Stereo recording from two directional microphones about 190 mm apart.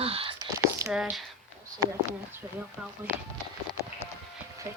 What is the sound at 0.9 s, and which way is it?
Speech, 5° right (ahead or behind).